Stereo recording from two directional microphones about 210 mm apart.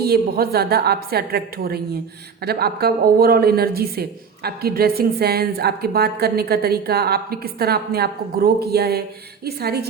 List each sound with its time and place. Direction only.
0.0 s a woman's voice: 50° right (ahead or behind)